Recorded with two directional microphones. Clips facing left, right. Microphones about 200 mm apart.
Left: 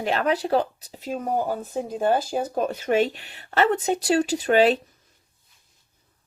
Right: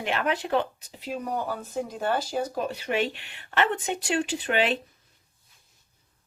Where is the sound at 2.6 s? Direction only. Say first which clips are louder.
Left 9 dB; 45° left (ahead or behind).